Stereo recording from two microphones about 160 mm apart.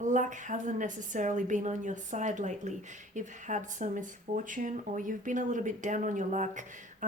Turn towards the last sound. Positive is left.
turn(degrees=-50)  # may be behind; listen again after turning